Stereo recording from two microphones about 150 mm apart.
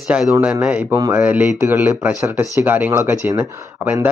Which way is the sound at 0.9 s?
20° right (ahead or behind).